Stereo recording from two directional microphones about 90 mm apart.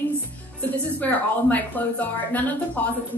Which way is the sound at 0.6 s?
20° left (ahead or behind).